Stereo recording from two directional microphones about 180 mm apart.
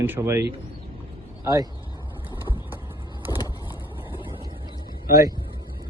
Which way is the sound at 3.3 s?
20° left (ahead or behind).